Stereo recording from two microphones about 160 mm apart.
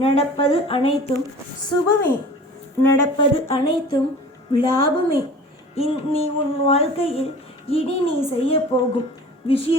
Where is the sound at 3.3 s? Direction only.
35° left (ahead or behind).